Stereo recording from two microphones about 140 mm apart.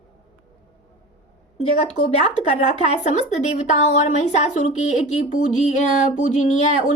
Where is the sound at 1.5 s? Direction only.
50° left (ahead or behind).